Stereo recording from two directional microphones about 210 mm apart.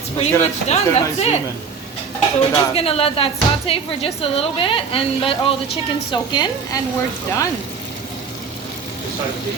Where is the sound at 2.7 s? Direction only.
30° left (ahead or behind).